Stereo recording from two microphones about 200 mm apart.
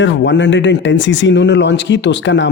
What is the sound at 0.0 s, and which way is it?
Speech, 65° left (ahead or behind).